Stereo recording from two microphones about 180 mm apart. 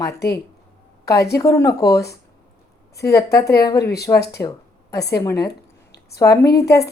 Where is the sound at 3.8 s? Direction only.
65° left (ahead or behind).